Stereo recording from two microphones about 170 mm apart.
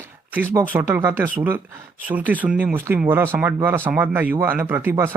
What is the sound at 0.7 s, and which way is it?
Speech, 15° right (ahead or behind).